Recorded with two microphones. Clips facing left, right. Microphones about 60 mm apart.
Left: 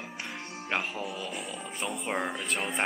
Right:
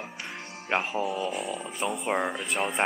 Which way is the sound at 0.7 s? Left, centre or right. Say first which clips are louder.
Right 4 dB; right.